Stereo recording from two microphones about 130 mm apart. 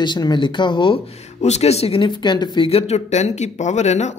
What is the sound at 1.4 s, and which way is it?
Speech, 55° left (ahead or behind).